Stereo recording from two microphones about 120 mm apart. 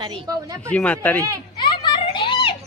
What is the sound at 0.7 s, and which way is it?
Speech, 10° left (ahead or behind).